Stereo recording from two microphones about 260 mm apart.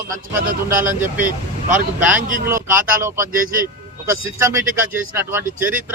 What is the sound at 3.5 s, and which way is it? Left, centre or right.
Speech, right.